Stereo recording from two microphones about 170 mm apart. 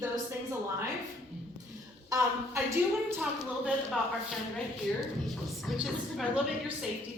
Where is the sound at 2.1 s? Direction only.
15° right (ahead or behind).